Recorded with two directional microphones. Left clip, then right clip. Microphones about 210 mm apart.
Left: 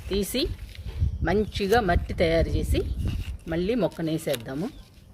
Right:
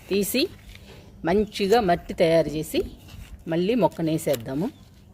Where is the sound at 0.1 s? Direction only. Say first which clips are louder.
Right 3 dB; 30° right (ahead or behind).